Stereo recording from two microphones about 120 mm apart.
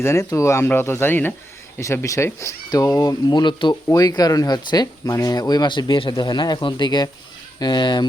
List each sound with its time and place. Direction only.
0.0 s speech: 25° left (ahead or behind)